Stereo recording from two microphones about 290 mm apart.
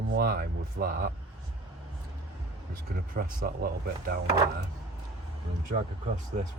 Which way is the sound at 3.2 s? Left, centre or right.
Right.